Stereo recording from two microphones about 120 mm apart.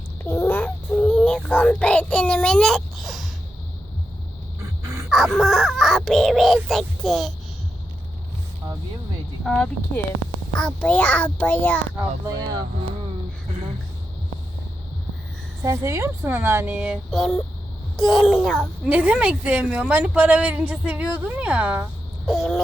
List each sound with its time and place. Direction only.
0.3 s child singing: 15° left (ahead or behind); by 3.2 s centre (ahead or behind)
5.0 s speech: centre (ahead or behind)
9.4 s a child's voice: 5° left (ahead or behind)
15.6 s a woman's voice: 25° right (ahead or behind); by 18.7 s 5° left (ahead or behind)
18.9 s a woman's voice: 10° right (ahead or behind)
22.3 s speech: centre (ahead or behind)